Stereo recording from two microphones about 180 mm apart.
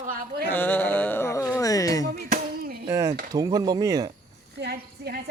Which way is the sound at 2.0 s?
50° right (ahead or behind).